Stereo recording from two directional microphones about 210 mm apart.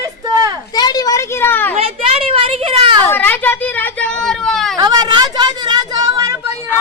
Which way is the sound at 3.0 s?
10° left (ahead or behind).